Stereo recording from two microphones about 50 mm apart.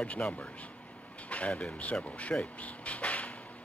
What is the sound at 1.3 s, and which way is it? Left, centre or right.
Speech, left.